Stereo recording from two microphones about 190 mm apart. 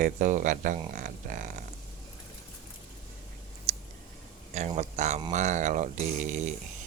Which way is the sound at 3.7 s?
35° right (ahead or behind).